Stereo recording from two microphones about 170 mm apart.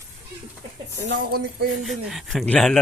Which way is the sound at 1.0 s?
80° right.